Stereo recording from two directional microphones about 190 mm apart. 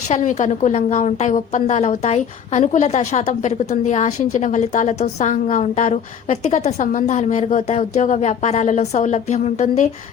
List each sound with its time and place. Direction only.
0.1 s a woman's voice: 40° left (ahead or behind)